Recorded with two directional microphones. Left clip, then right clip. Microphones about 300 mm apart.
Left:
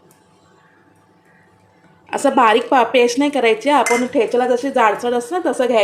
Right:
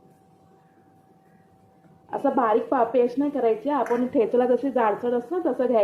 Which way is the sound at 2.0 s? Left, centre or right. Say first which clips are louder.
Left 8 dB; left.